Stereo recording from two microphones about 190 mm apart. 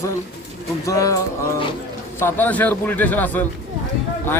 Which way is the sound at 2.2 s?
10° left (ahead or behind).